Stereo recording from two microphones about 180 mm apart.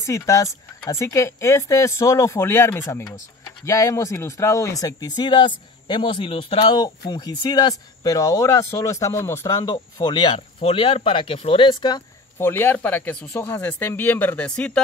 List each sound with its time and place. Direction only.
0.0 s speech: 15° left (ahead or behind)
12.4 s speech: 10° left (ahead or behind)